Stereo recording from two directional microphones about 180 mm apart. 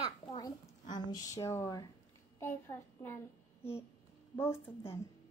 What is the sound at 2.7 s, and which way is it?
Child singing, 15° left (ahead or behind).